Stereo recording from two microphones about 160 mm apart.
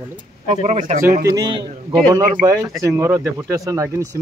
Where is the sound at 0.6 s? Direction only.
50° right (ahead or behind).